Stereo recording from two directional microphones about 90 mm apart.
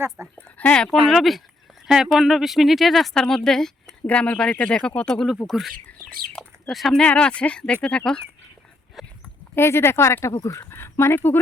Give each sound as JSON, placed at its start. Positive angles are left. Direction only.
{"t": 0.3, "sound": "speech", "side_deg": 10}
{"t": 1.1, "sound": "speech", "side_deg": 0}
{"t": 7.0, "sound": "speech", "side_deg": 10}
{"t": 9.0, "sound": "speech", "side_deg": 0}
{"t": 9.6, "sound": "speech", "side_deg": 30}